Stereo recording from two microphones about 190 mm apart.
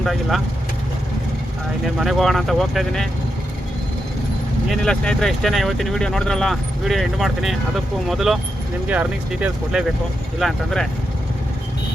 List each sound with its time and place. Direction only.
0.0 s speech: centre (ahead or behind)
2.0 s speech: centre (ahead or behind)
4.7 s speech: 5° left (ahead or behind)